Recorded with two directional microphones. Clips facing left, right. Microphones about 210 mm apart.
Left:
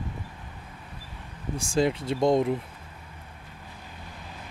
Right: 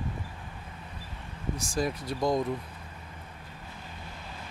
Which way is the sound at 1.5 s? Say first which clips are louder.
Left 7 dB; 30° left (ahead or behind).